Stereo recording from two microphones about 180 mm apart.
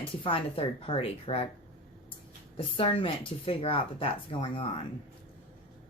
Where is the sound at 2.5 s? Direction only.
30° left (ahead or behind).